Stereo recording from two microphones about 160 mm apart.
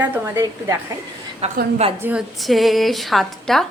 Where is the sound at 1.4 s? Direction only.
40° right (ahead or behind).